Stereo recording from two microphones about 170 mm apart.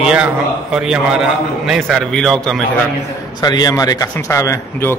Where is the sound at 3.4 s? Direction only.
25° left (ahead or behind).